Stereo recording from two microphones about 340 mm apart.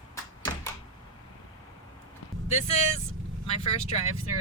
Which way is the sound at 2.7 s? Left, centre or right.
Centre.